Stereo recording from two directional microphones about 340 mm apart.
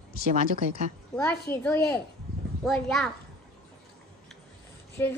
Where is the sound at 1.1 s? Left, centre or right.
Centre.